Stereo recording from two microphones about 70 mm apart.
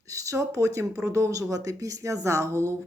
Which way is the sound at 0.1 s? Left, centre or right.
Right.